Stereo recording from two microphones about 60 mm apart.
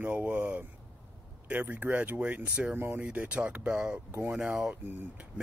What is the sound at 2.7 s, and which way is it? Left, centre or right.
Speech, right.